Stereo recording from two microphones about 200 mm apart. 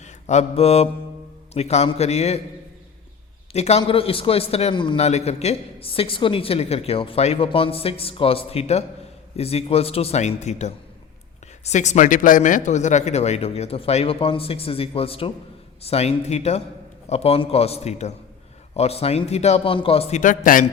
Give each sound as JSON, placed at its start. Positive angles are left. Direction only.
{"t": 0.0, "sound": "mantra", "side_deg": 35}
{"t": 1.5, "sound": "speech", "side_deg": 30}
{"t": 3.5, "sound": "a man's voice", "side_deg": 30}